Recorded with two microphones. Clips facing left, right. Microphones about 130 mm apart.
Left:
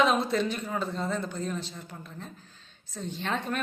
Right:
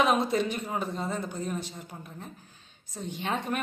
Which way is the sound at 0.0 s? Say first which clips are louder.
Even; 15° right (ahead or behind).